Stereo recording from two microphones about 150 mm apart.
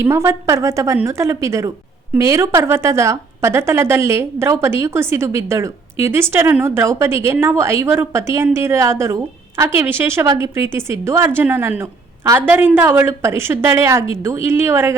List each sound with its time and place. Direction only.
0.0 s a woman's voice: 15° right (ahead or behind)